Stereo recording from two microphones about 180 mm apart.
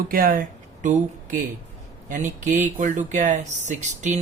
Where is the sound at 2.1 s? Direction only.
45° right (ahead or behind).